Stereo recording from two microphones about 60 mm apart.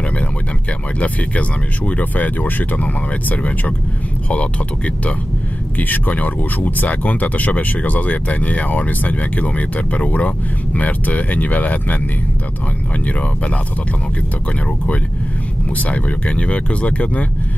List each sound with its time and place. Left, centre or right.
0.9 s speech: left
13.0 s speech: left
15.7 s speech: left